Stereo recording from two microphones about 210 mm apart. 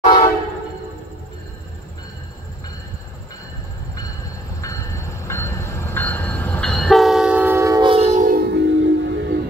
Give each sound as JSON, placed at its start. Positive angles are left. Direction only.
{"t": 0.0, "sound": "train", "side_deg": 20}
{"t": 4.6, "sound": "train", "side_deg": 15}